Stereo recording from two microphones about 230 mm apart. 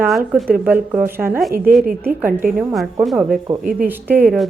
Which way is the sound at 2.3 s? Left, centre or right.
Right.